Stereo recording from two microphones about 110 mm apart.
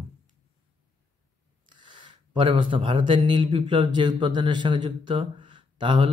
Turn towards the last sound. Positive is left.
turn(degrees=-50)  # may be behind; listen again after turning